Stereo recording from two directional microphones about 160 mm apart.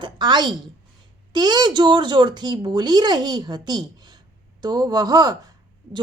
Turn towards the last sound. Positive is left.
turn(degrees=-25)  # may be behind; listen again after turning